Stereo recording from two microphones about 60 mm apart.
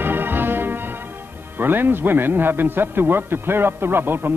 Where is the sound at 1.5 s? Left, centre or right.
Right.